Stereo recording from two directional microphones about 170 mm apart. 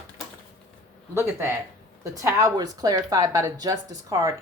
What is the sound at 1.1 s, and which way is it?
A woman's voice, 15° right (ahead or behind).